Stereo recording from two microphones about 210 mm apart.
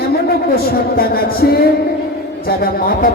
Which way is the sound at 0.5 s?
45° left (ahead or behind).